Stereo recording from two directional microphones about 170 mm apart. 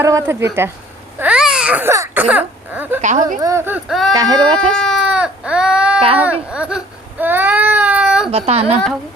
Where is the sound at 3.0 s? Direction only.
45° right (ahead or behind).